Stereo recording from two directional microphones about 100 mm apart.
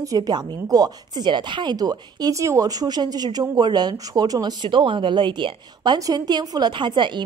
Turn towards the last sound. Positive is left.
turn(degrees=-50)  # may be behind; listen again after turning